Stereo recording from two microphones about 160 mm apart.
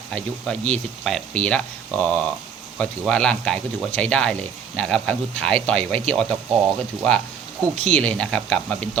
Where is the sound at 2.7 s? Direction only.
5° left (ahead or behind).